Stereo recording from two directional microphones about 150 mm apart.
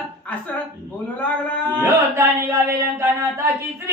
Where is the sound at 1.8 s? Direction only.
15° right (ahead or behind).